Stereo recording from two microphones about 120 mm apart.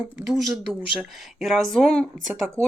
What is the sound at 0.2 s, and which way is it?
Speech, centre (ahead or behind).